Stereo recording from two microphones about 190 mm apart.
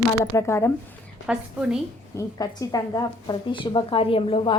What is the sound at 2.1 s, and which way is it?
A woman's voice, 20° left (ahead or behind).